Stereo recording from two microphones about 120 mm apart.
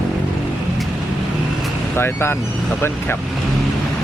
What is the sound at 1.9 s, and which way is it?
Speech, 20° left (ahead or behind).